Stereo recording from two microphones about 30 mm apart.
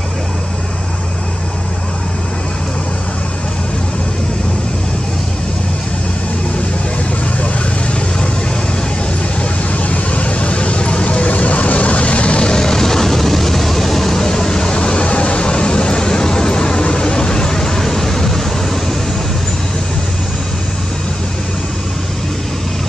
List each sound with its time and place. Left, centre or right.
9.4 s vehicle: left
12.4 s vehicle: left